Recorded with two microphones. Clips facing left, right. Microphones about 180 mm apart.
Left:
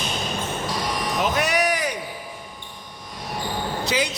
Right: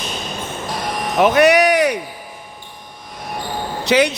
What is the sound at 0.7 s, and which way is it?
Basketball bounce, 55° right (ahead or behind).